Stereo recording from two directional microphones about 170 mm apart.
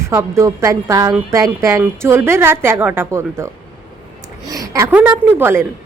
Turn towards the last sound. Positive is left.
turn(degrees=-15)  # may be behind; listen again after turning